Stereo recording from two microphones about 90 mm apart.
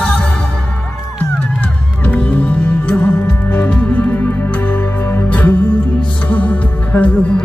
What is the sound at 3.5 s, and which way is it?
Music, 20° left (ahead or behind).